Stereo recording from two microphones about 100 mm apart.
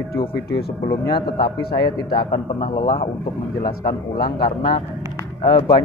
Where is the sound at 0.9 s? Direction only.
55° left (ahead or behind).